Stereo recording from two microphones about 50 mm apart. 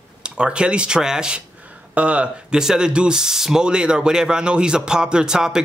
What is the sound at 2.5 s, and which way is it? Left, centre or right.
Speech, centre.